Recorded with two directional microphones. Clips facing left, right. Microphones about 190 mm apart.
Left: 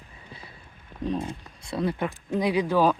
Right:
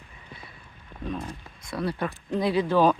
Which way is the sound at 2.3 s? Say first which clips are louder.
Even; 15° left (ahead or behind).